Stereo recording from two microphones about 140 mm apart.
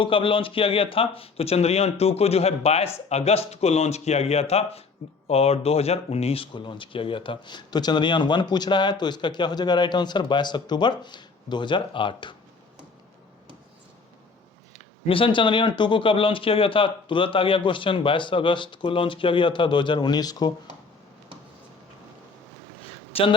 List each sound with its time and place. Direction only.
0.0 s speech: 40° left (ahead or behind)
15.0 s speech: 40° left (ahead or behind)
22.8 s a sound: 45° left (ahead or behind)